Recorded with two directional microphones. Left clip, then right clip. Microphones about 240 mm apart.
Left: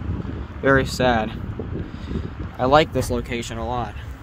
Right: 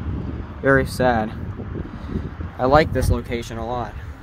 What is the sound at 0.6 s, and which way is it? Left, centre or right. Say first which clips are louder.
Speech: right 1 dB; centre.